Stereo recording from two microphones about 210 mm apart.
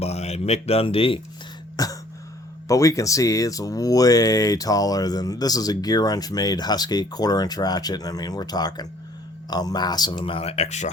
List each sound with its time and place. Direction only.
0.0 s speech: 30° left (ahead or behind)
1.7 s throat clearing: 15° left (ahead or behind)
2.6 s speech: 15° left (ahead or behind); by 10.9 s 35° left (ahead or behind)